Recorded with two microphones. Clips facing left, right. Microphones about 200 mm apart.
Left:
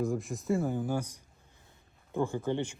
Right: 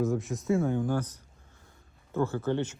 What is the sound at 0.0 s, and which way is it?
Speech, centre (ahead or behind).